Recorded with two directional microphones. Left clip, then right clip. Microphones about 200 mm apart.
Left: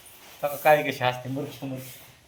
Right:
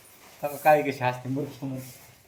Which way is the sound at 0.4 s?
5° left (ahead or behind).